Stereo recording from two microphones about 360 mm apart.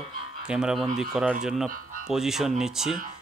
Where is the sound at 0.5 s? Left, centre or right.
Centre.